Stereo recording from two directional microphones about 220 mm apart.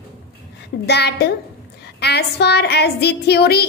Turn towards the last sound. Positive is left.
turn(degrees=45)  # may be behind; listen again after turning